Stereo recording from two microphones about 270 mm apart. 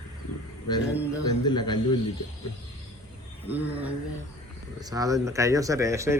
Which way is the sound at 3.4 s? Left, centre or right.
Centre.